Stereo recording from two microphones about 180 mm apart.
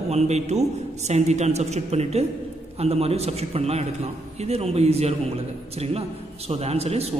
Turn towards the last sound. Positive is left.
turn(degrees=-35)  # may be behind; listen again after turning